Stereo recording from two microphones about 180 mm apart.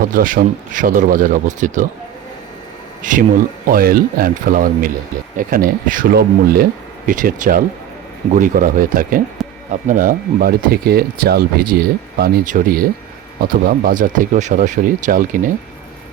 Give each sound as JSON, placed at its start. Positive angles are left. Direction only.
{"t": 0.0, "sound": "speech", "side_deg": -50}
{"t": 3.0, "sound": "speech", "side_deg": -50}